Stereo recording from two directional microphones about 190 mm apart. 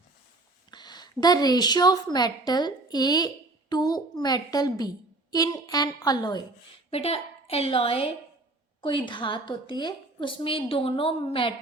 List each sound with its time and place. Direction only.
0.7 s a woman's voice: 20° left (ahead or behind)
6.9 s a woman's voice: 30° left (ahead or behind)